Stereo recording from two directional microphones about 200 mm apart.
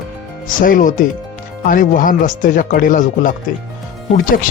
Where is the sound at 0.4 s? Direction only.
45° left (ahead or behind).